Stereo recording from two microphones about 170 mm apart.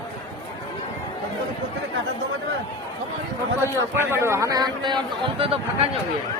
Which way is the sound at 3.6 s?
15° right (ahead or behind).